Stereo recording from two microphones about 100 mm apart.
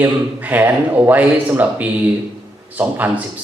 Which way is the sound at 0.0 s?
20° right (ahead or behind).